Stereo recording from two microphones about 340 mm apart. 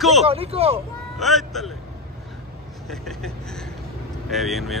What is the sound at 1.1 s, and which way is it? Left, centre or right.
Speech, centre.